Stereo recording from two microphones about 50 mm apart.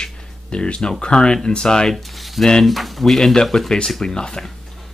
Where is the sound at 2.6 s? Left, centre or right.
Centre.